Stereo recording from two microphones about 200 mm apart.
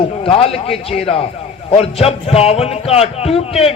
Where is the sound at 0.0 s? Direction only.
25° left (ahead or behind).